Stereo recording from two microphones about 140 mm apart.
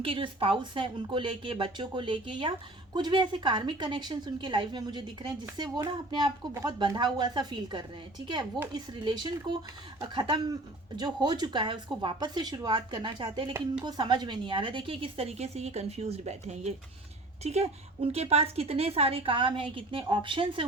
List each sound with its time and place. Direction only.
0.0 s speech: 40° right (ahead or behind)